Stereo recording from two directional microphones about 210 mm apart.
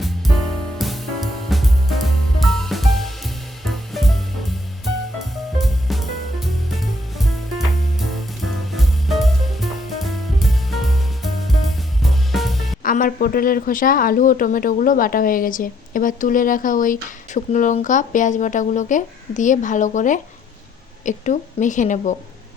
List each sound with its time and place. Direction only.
0.0 s music: centre (ahead or behind)
5.5 s music: centre (ahead or behind)
7.9 s music: centre (ahead or behind)
12.8 s speech: 40° left (ahead or behind)